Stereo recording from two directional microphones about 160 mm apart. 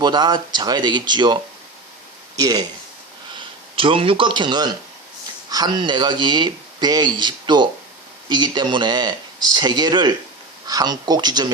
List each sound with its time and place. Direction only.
0.0 s speech: 25° right (ahead or behind)
3.8 s speech: 35° right (ahead or behind)